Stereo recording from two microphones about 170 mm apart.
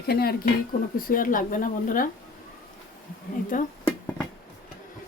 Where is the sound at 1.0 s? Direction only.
55° left (ahead or behind).